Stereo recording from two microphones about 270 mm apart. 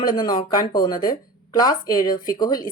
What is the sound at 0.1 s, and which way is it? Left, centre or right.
Speech, centre.